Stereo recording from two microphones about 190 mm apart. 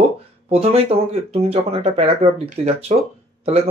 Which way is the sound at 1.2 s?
30° right (ahead or behind).